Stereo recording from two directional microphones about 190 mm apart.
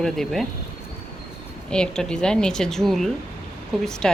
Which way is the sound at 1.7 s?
5° left (ahead or behind).